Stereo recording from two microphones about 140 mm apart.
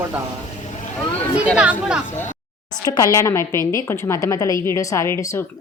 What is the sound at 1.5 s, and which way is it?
Speech, 10° right (ahead or behind).